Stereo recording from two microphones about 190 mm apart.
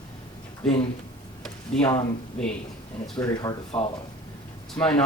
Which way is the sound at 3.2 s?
20° left (ahead or behind).